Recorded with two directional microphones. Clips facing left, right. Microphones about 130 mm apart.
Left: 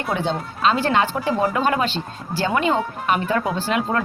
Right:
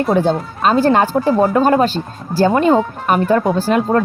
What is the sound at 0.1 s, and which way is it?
Speech, 45° right (ahead or behind).